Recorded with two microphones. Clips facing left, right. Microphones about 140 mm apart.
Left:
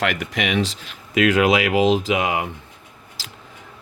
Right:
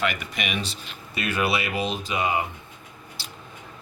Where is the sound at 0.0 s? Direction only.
85° left.